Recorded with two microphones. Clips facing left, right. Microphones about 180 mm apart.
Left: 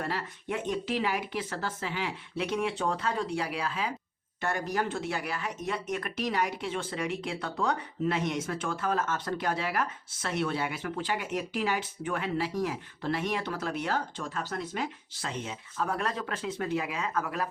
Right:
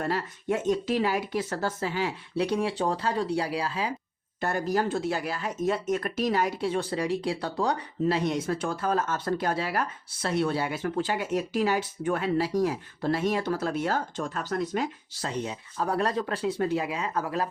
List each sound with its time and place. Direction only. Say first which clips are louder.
0.1 s speech: right 5 dB; 40° right (ahead or behind)